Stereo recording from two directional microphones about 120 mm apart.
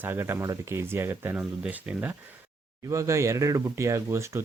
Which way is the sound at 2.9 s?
25° right (ahead or behind).